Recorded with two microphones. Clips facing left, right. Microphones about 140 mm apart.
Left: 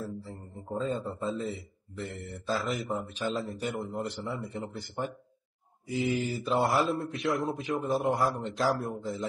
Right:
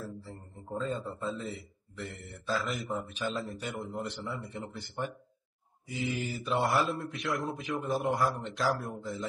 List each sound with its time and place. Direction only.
0.0 s a man's voice: centre (ahead or behind)
5.9 s mantra: 35° left (ahead or behind)
6.5 s speech: centre (ahead or behind)